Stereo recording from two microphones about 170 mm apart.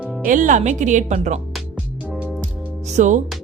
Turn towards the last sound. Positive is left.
turn(degrees=-45)  # may be behind; listen again after turning